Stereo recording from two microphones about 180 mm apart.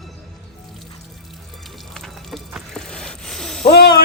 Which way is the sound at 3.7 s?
65° left (ahead or behind).